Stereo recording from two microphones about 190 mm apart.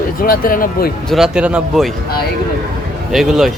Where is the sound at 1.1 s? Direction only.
5° right (ahead or behind).